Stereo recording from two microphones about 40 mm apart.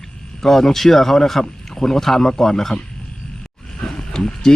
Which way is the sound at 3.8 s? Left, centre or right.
Centre.